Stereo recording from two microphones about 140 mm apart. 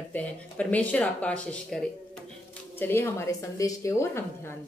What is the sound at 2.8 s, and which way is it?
Speech, 15° left (ahead or behind).